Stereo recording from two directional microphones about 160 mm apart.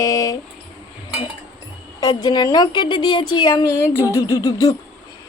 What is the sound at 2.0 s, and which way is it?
A woman's voice, 25° left (ahead or behind).